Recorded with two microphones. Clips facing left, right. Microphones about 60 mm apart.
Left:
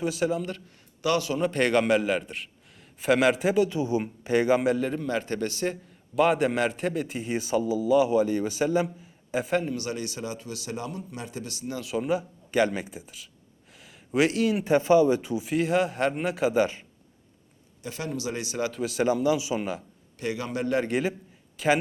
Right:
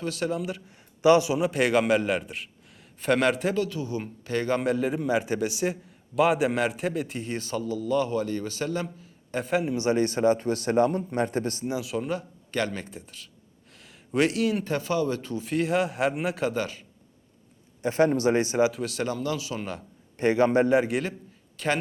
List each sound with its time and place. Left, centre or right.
0.0 s a man's voice: centre
1.0 s a man's voice: centre
1.4 s a man's voice: centre
3.6 s a man's voice: left; by 9.6 s centre
9.7 s a man's voice: right
11.8 s a man's voice: centre
13.7 s a sound: centre
14.6 s a man's voice: centre
16.6 s a man's voice: left
17.8 s speech: right
18.7 s a man's voice: centre
19.0 s a man's voice: centre
20.1 s speech: right
20.9 s a man's voice: centre